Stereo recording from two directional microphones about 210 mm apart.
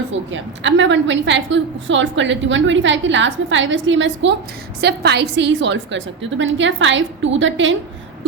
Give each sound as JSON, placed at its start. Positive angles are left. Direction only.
{"t": 0.3, "sound": "a woman's voice", "side_deg": -60}